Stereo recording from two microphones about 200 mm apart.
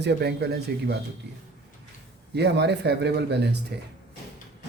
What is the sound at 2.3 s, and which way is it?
Speech, 55° right (ahead or behind).